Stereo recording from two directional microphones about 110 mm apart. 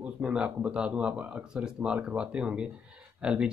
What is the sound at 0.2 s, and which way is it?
Speech, 10° right (ahead or behind).